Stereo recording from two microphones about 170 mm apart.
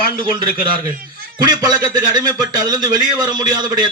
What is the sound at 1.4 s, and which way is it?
A man's voice, 25° right (ahead or behind).